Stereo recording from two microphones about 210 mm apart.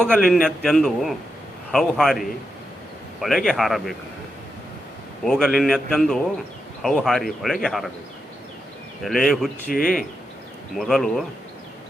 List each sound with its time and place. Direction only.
0.0 s a man's voice: 5° left (ahead or behind)
5.2 s a man's voice: centre (ahead or behind)
9.0 s a man's voice: centre (ahead or behind)
9.7 s speech: 40° left (ahead or behind)
10.8 s a man's voice: centre (ahead or behind)